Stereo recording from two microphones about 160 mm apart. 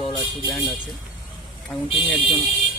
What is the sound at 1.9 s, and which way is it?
Speech, 35° left (ahead or behind).